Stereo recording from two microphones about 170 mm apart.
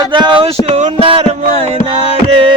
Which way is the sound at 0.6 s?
40° right (ahead or behind).